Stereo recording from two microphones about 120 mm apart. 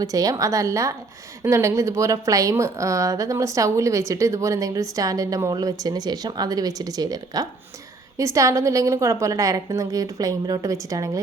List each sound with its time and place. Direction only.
0.0 s speech: 30° right (ahead or behind)